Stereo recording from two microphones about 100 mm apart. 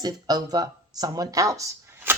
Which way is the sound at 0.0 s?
40° right (ahead or behind).